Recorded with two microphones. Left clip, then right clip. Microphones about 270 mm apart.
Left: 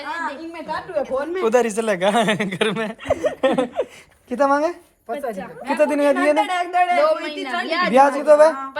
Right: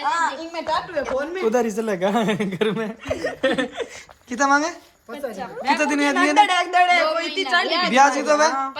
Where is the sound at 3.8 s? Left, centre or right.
Centre.